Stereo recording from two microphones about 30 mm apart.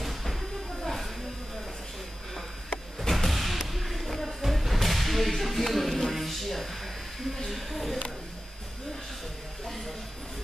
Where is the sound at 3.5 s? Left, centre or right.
Centre.